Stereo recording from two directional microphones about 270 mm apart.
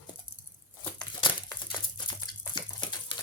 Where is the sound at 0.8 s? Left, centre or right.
Centre.